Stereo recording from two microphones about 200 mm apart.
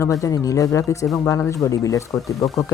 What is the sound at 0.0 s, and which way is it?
Speech, 15° left (ahead or behind).